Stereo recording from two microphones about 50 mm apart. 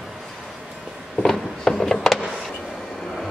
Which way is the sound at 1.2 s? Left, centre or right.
Centre.